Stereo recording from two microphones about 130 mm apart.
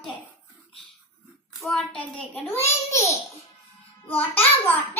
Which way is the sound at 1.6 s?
5° left (ahead or behind).